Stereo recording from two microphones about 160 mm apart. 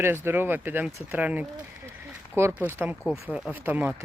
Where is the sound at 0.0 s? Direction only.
15° right (ahead or behind).